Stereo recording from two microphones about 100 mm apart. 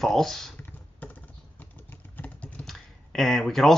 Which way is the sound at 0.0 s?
5° left (ahead or behind).